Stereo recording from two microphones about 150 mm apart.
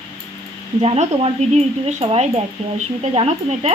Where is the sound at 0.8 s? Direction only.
40° right (ahead or behind).